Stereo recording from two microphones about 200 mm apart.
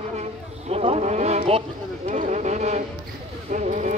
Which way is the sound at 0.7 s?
30° right (ahead or behind).